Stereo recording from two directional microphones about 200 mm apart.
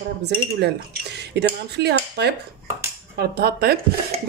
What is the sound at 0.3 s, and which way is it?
Speech, 55° right (ahead or behind).